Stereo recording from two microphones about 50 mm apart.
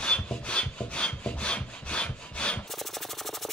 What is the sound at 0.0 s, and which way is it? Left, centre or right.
Wood, left.